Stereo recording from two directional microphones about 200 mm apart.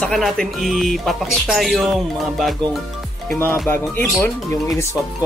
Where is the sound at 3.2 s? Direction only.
5° left (ahead or behind).